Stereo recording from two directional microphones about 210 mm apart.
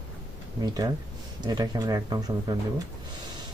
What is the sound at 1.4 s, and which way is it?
Speech, 20° right (ahead or behind).